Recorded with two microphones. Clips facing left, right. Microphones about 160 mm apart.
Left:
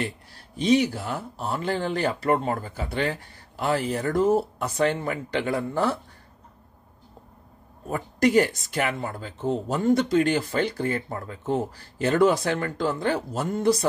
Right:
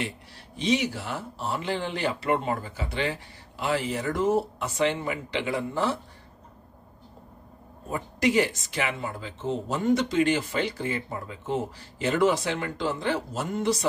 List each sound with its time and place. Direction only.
0.6 s speech: 45° left (ahead or behind)
7.9 s speech: 45° left (ahead or behind)